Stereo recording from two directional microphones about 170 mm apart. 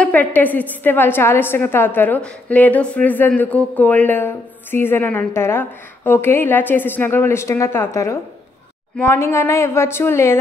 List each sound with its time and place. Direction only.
0.0 s a woman's voice: 10° left (ahead or behind)